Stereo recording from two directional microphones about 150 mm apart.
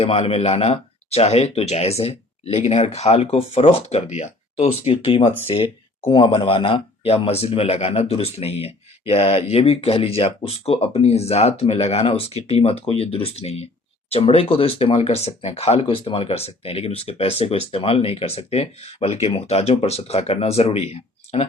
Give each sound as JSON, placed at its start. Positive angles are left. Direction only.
{"t": 0.0, "sound": "speech", "side_deg": 40}